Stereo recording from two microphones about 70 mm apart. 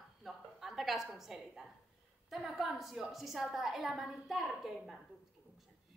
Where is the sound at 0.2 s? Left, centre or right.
Centre.